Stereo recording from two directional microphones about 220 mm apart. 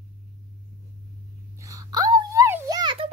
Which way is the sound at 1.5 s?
15° right (ahead or behind).